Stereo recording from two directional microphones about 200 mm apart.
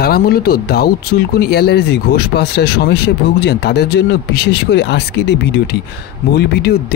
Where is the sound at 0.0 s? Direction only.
50° left (ahead or behind).